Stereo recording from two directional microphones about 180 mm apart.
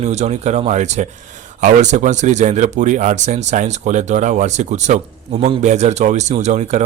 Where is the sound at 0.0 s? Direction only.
40° right (ahead or behind).